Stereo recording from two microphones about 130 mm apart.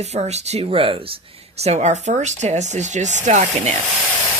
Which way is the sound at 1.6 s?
55° right (ahead or behind).